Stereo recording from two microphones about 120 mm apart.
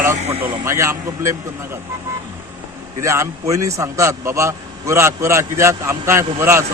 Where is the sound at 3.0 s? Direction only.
25° right (ahead or behind).